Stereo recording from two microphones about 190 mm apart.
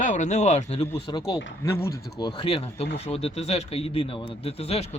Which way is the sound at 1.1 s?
20° left (ahead or behind).